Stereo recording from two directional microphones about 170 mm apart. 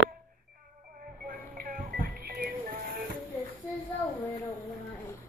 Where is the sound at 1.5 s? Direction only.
60° right (ahead or behind).